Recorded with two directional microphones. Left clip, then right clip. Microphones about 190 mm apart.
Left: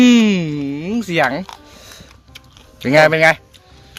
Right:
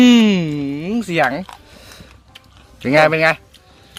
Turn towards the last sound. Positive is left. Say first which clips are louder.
# left 2 dB
turn(degrees=15)  # may be behind; listen again after turning